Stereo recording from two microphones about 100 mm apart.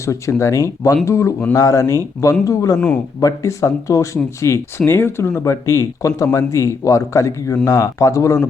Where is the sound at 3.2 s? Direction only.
35° left (ahead or behind).